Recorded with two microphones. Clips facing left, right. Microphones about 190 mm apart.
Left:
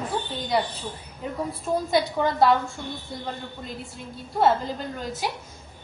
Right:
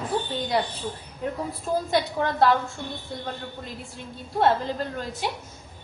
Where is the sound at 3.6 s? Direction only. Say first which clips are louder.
Left 1 dB; centre (ahead or behind).